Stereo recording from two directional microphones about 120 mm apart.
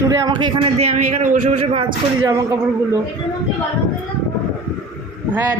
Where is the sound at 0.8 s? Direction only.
80° right.